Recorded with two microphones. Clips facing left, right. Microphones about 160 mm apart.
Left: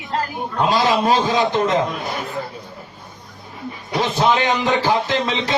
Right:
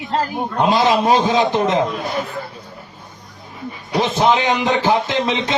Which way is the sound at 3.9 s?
20° right (ahead or behind).